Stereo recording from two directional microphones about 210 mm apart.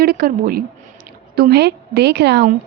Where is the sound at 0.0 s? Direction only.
45° right (ahead or behind).